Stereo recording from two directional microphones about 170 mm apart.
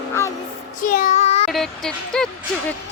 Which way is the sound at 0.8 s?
55° left (ahead or behind).